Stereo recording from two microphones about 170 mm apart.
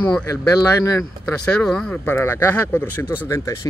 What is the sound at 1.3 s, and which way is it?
Speech, 5° left (ahead or behind).